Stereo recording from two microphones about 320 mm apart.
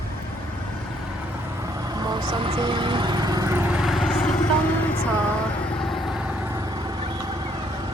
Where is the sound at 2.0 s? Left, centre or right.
Centre.